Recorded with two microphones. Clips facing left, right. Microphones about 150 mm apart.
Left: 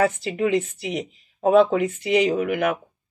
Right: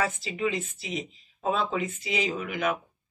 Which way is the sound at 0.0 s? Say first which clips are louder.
Left 7 dB; 60° left (ahead or behind).